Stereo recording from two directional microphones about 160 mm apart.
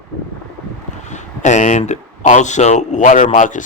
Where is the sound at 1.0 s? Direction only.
50° left (ahead or behind).